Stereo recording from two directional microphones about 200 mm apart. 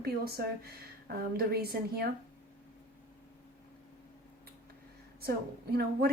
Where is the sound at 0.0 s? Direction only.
50° right (ahead or behind).